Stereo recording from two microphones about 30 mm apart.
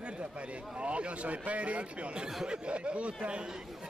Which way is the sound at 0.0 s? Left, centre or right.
Right.